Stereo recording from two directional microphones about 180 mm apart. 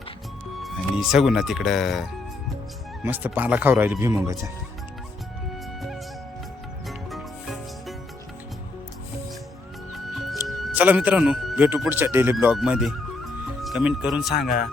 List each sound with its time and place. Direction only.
0.6 s speech: centre (ahead or behind); by 4.4 s 15° right (ahead or behind)
6.8 s music: centre (ahead or behind)
9.9 s music: centre (ahead or behind)
14.3 s speech: 50° left (ahead or behind)